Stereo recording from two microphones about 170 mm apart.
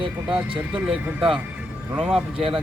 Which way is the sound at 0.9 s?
5° right (ahead or behind).